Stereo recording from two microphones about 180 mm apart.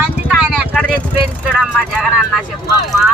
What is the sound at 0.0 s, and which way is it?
Vehicle, 5° right (ahead or behind).